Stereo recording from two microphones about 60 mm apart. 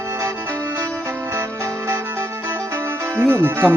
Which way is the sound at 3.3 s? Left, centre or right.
Right.